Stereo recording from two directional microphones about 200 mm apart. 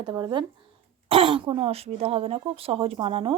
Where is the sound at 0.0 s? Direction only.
20° right (ahead or behind).